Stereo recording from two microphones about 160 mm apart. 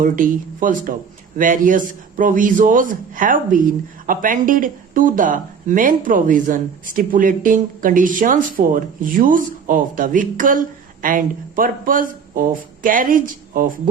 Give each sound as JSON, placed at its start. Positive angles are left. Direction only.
{"t": 0.0, "sound": "a man's voice", "side_deg": -55}